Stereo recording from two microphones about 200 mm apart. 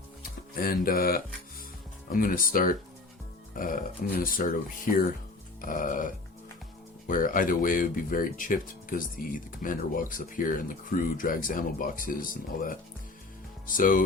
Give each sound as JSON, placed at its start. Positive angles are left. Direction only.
{"t": 0.2, "sound": "speech", "side_deg": 45}
{"t": 5.6, "sound": "music", "side_deg": 40}
{"t": 7.1, "sound": "speech", "side_deg": 45}